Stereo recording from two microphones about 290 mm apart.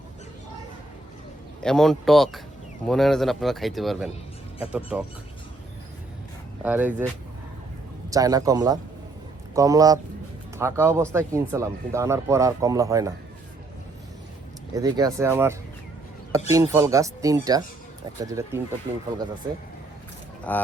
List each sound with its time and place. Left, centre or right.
1.6 s speech: centre
6.7 s speech: centre
8.1 s speech: centre
14.8 s speech: centre
20.5 s speech: centre